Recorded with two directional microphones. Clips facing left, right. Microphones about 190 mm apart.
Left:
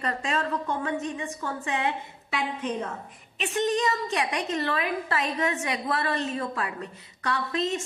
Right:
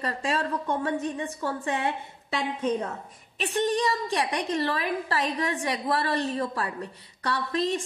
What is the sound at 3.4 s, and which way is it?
A woman's voice, 35° right (ahead or behind).